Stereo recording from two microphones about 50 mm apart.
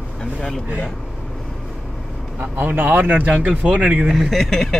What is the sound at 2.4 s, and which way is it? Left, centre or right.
Speech, right.